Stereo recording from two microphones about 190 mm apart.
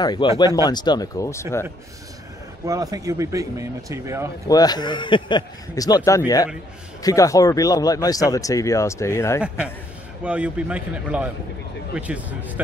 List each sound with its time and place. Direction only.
0.0 s speech: 20° left (ahead or behind)
2.6 s speech: 20° right (ahead or behind)
4.5 s speech: 20° left (ahead or behind)
10.2 s speech: 5° right (ahead or behind)